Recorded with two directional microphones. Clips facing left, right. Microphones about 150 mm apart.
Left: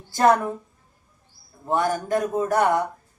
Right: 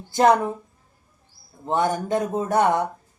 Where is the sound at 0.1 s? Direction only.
20° right (ahead or behind).